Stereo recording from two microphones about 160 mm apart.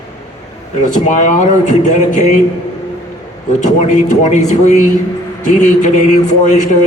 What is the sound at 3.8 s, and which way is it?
Speech, 45° left (ahead or behind).